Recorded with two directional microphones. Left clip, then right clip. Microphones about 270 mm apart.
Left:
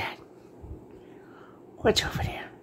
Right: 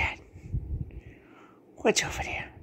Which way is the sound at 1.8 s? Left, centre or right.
Centre.